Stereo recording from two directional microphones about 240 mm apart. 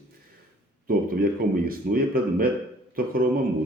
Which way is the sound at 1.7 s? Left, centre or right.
Right.